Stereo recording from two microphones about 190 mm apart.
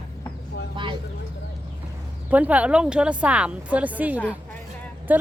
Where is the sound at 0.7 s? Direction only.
25° right (ahead or behind).